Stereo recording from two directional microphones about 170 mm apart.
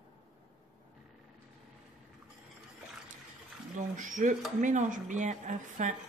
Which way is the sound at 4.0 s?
50° right (ahead or behind).